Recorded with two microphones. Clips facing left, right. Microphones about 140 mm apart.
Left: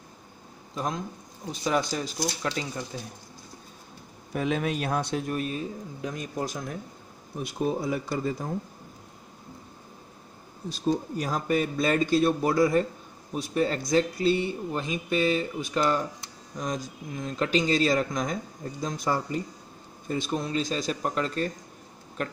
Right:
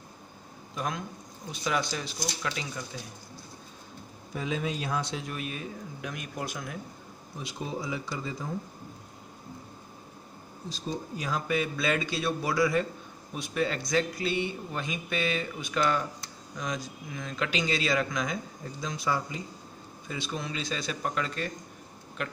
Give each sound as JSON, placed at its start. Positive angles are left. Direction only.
{"t": 0.7, "sound": "speech", "side_deg": 30}
{"t": 4.3, "sound": "a man's voice", "side_deg": 60}
{"t": 7.3, "sound": "a man's voice", "side_deg": 55}
{"t": 10.7, "sound": "a man's voice", "side_deg": 45}